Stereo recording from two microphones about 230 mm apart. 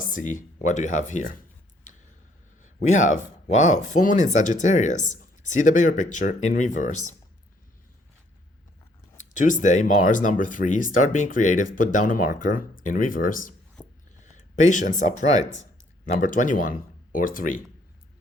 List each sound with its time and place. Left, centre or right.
0.0 s speech: left
2.6 s speech: left
9.1 s speech: left